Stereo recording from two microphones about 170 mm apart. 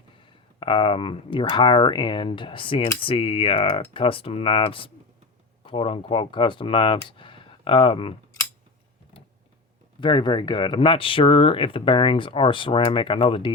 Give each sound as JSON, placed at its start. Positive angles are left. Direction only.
{"t": 0.2, "sound": "speech", "side_deg": 30}
{"t": 10.0, "sound": "speech", "side_deg": 30}